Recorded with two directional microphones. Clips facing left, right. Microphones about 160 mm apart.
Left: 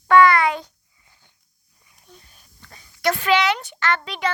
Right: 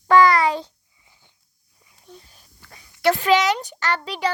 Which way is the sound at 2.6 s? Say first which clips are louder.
Left 1 dB; 15° right (ahead or behind).